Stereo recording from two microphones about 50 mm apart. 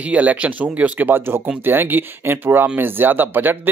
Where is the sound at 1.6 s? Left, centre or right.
Right.